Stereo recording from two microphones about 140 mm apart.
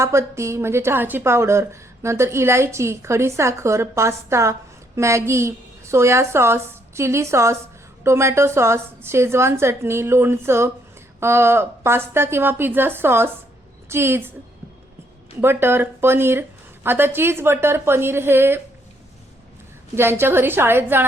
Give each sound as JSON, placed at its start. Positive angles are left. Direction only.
{"t": 0.0, "sound": "a woman's voice", "side_deg": -20}
{"t": 15.4, "sound": "speech", "side_deg": -15}
{"t": 20.0, "sound": "speech", "side_deg": -15}